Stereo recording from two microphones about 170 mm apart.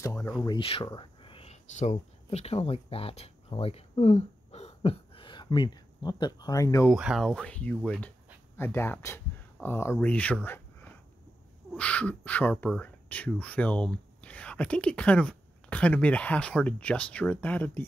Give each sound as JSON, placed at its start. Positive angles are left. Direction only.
{"t": 0.0, "sound": "speech", "side_deg": 15}
{"t": 0.5, "sound": "speech", "side_deg": 30}
{"t": 6.9, "sound": "speech", "side_deg": 0}